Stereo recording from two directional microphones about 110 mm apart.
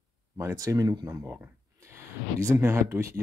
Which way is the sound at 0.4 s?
25° right (ahead or behind).